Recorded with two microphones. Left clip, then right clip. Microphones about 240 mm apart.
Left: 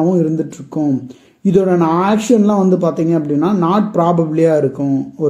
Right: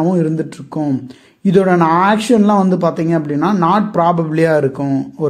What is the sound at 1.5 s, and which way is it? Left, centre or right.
Speech, right.